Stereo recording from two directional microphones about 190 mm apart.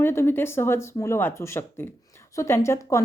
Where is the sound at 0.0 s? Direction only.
15° left (ahead or behind).